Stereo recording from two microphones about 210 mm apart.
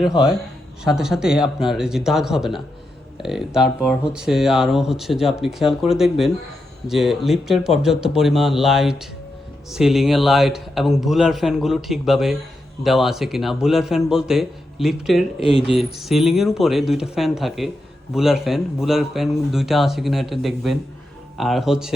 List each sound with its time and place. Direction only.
0.0 s speech: centre (ahead or behind)
15.4 s speech: 25° left (ahead or behind)
15.6 s speech: centre (ahead or behind)